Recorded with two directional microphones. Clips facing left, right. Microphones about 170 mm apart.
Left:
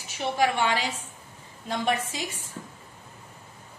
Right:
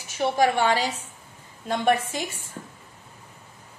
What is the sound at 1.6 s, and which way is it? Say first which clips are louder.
Speech: right 5 dB; 55° right (ahead or behind).